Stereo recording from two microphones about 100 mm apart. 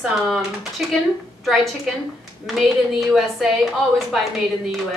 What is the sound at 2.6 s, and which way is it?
A woman's voice, centre (ahead or behind).